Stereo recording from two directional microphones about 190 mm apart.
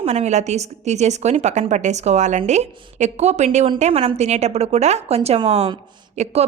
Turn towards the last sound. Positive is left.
turn(degrees=-35)  # may be behind; listen again after turning